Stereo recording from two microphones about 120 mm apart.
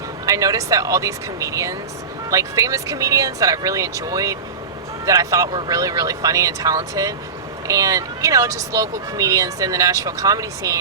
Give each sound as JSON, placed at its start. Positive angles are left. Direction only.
{"t": 0.3, "sound": "speech", "side_deg": -30}